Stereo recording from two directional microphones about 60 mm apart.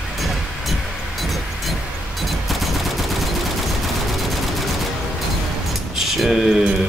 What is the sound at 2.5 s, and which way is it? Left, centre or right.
Gunshot, centre.